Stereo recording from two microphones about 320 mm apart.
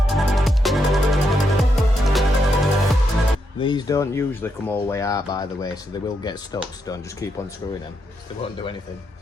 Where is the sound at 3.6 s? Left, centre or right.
Centre.